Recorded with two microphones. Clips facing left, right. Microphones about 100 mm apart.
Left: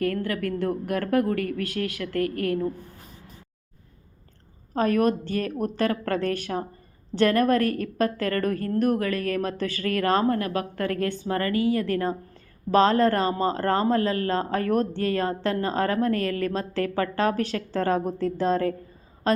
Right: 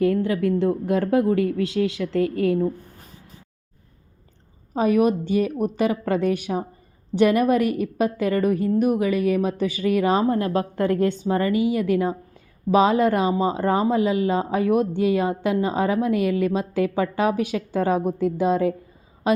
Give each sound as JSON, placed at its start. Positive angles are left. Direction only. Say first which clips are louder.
{"t": 0.0, "sound": "a woman's voice", "louder": "right 6 dB", "side_deg": -20}
{"t": 4.7, "sound": "a woman's voice", "louder": "right 3 dB", "side_deg": -10}